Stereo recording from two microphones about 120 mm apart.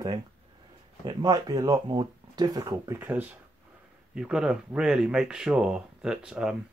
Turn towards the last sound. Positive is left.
turn(degrees=-5)  # may be behind; listen again after turning